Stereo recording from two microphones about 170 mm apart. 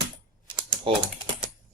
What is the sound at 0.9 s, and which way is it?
Speech, 30° right (ahead or behind).